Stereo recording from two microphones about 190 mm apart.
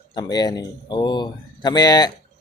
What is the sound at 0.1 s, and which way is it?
Speech, 20° left (ahead or behind).